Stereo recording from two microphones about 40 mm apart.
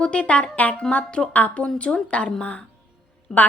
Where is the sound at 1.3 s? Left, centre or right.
Left.